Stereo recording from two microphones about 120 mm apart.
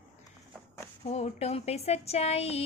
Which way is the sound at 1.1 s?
60° left (ahead or behind).